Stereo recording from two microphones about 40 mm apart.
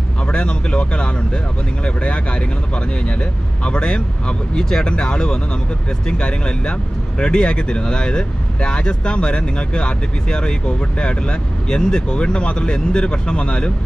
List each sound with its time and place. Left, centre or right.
0.3 s speech: left